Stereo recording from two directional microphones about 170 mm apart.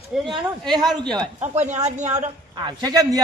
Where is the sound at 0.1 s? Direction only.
5° right (ahead or behind).